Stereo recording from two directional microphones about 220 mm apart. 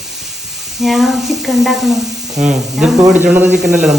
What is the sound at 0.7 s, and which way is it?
Speech, centre (ahead or behind).